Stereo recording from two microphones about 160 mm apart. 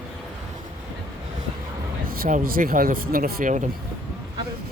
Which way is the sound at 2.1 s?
60° right (ahead or behind).